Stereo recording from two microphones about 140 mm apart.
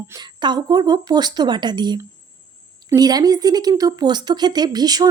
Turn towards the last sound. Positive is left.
turn(degrees=-30)  # may be behind; listen again after turning